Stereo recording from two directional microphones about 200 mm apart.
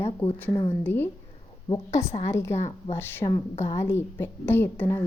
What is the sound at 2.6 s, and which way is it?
Speech, 35° left (ahead or behind).